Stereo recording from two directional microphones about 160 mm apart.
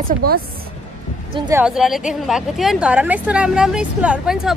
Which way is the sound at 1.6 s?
5° right (ahead or behind).